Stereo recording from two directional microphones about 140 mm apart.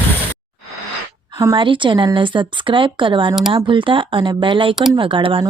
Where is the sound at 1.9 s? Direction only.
25° right (ahead or behind).